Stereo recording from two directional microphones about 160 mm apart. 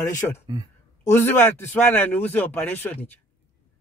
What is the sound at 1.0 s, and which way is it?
Speech, 15° left (ahead or behind).